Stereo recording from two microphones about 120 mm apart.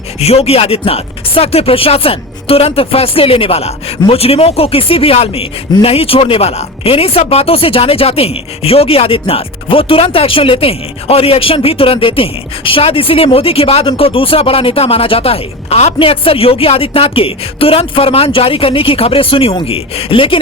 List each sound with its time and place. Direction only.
0.2 s speech: 60° left (ahead or behind)